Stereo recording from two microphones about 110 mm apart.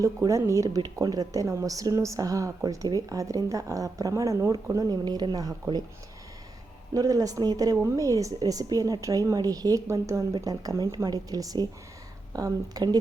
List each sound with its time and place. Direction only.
0.0 s a woman's voice: 30° right (ahead or behind)
6.9 s a woman's voice: 35° right (ahead or behind)